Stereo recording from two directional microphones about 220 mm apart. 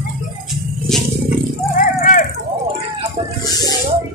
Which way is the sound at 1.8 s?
35° left (ahead or behind).